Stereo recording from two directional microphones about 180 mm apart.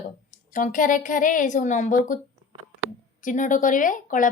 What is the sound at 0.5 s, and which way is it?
A woman's voice, 45° left (ahead or behind).